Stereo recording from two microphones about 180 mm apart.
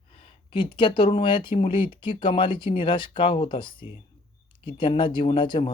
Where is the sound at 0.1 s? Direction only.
30° left (ahead or behind).